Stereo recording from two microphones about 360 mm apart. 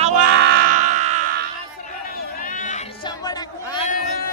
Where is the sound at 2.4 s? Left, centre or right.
Left.